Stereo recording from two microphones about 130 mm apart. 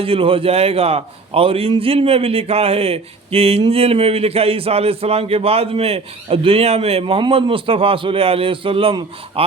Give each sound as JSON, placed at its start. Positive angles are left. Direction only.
{"t": 0.0, "sound": "a man's voice", "side_deg": -45}